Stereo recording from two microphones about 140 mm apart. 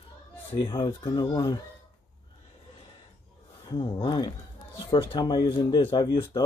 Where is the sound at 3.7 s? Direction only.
35° left (ahead or behind).